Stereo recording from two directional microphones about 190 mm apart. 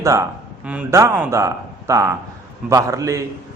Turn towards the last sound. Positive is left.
turn(degrees=-15)  # may be behind; listen again after turning